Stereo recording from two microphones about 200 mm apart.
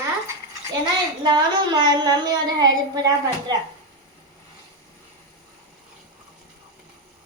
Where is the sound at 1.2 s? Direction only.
20° right (ahead or behind).